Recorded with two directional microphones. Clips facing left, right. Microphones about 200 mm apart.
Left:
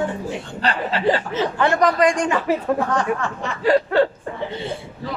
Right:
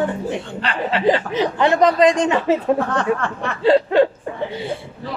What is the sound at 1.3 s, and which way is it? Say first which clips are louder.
Speech: right 3 dB; 20° right (ahead or behind).